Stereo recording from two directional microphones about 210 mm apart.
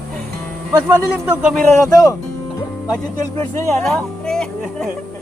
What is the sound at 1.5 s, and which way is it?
Speech, 5° left (ahead or behind).